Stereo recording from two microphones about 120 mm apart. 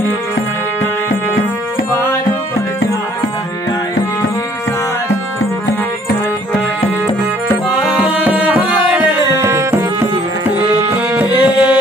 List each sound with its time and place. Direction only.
7.7 s music: 5° right (ahead or behind)
9.3 s music: 25° right (ahead or behind)
10.5 s tabla: 15° right (ahead or behind)